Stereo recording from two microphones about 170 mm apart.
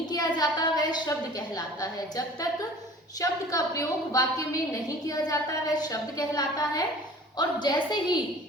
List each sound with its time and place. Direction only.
0.1 s a woman's voice: 25° left (ahead or behind)